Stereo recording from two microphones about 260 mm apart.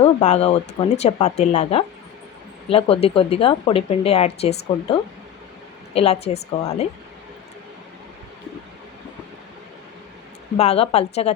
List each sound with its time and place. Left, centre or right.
0.0 s speech: left
10.6 s speech: left